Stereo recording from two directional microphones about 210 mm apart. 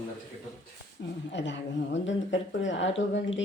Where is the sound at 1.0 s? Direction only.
55° left (ahead or behind).